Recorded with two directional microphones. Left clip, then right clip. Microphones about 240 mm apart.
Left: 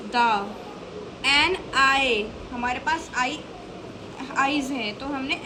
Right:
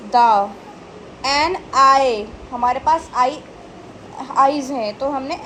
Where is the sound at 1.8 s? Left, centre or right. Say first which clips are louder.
Right 8 dB; centre.